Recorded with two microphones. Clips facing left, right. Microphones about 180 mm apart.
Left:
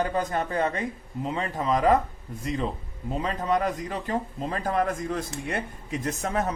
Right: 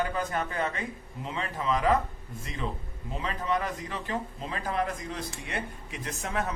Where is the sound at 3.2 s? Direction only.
40° left (ahead or behind).